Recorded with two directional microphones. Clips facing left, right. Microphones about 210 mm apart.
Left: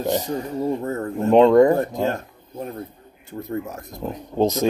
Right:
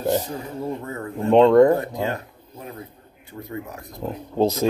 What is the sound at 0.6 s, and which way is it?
Speech, 45° left (ahead or behind).